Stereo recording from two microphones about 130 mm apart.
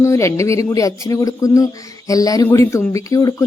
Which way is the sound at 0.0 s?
20° left (ahead or behind).